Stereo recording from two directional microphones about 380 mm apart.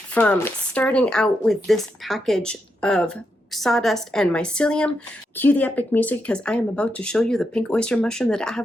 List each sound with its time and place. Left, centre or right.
0.1 s speech: centre